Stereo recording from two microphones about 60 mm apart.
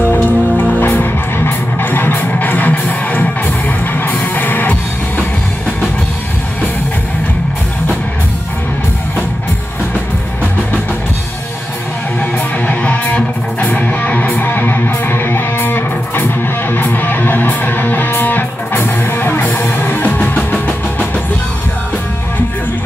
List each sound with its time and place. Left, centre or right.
0.1 s music: left
12.2 s music: left